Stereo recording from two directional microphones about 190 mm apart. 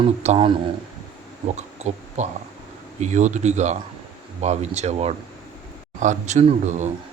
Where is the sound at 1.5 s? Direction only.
40° right (ahead or behind).